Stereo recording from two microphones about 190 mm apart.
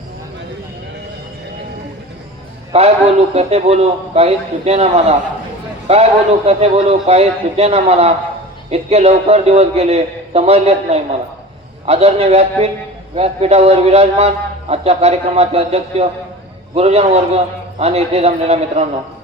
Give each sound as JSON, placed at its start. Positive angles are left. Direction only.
{"t": 2.7, "sound": "a man's voice", "side_deg": -30}